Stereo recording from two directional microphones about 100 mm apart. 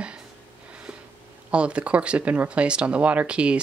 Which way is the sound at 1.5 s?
10° right (ahead or behind).